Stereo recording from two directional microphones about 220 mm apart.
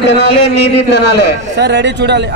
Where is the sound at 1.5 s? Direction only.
50° right (ahead or behind).